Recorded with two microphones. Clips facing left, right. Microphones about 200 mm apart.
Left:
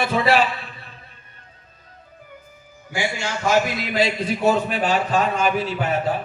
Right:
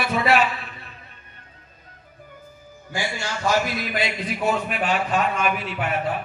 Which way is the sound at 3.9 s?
30° left (ahead or behind).